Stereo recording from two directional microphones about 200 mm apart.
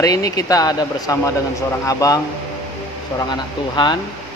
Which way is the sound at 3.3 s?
25° left (ahead or behind).